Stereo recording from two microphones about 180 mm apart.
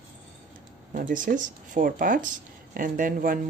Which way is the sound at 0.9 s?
50° right (ahead or behind).